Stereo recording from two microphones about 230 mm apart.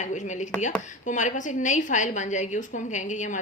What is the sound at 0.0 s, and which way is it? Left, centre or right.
A woman's voice, left.